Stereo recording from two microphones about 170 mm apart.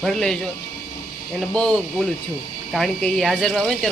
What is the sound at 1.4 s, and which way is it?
Speech, 5° left (ahead or behind).